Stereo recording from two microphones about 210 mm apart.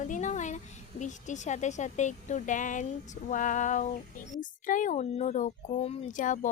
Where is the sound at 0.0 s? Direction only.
35° left (ahead or behind).